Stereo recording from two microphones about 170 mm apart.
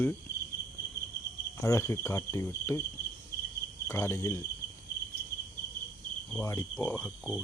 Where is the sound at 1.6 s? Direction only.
20° left (ahead or behind).